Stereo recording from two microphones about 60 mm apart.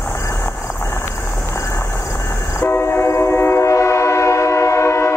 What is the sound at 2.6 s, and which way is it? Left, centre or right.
Train, left.